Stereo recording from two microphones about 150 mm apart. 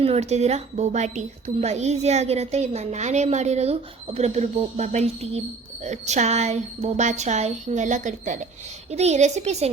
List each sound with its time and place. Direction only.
0.0 s a woman's voice: 45° right (ahead or behind)